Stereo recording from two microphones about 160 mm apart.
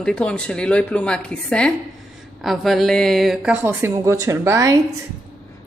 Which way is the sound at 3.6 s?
15° right (ahead or behind).